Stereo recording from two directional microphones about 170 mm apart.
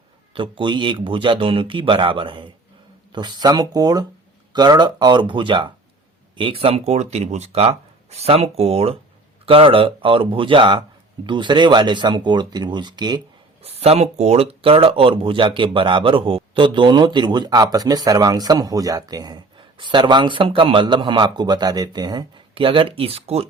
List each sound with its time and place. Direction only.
0.3 s speech: 30° right (ahead or behind)
13.6 s speech: 40° right (ahead or behind)